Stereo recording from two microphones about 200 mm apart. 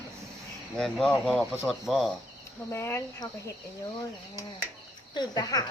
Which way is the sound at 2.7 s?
15° left (ahead or behind).